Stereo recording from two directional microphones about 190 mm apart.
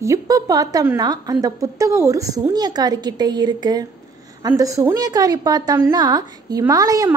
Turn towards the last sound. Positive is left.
turn(degrees=-20)  # may be behind; listen again after turning